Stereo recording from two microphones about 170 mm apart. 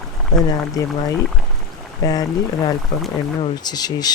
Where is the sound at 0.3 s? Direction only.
20° left (ahead or behind).